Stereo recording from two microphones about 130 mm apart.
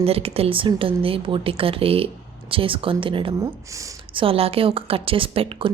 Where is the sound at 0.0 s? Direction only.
50° right (ahead or behind).